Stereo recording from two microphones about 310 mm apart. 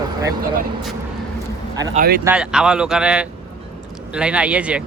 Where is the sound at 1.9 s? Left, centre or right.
Right.